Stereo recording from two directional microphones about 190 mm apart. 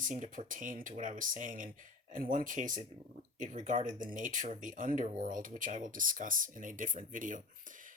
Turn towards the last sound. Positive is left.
turn(degrees=-45)  # may be behind; listen again after turning